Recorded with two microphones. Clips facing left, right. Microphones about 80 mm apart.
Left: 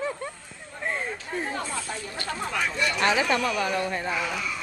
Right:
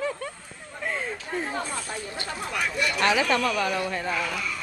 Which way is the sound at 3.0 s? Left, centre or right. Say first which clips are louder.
Right 1 dB; centre.